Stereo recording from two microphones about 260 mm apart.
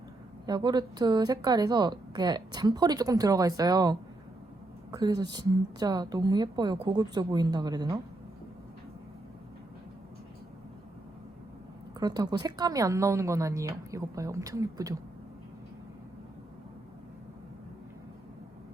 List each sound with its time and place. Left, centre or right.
0.4 s a woman's voice: centre
11.9 s a woman's voice: centre